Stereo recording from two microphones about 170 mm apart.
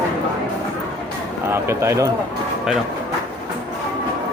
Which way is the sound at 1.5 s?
15° right (ahead or behind).